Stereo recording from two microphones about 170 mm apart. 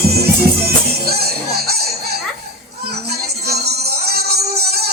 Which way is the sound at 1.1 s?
65° right (ahead or behind).